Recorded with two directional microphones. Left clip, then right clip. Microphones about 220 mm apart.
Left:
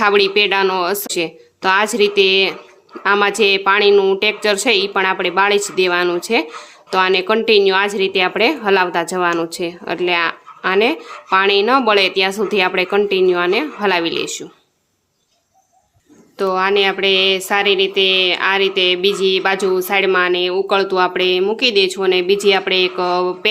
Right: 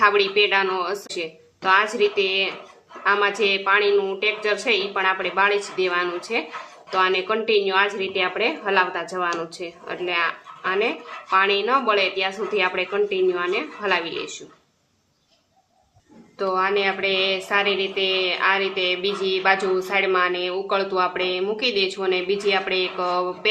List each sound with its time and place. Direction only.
0.0 s a woman's voice: 50° left (ahead or behind)
16.4 s a woman's voice: 45° left (ahead or behind)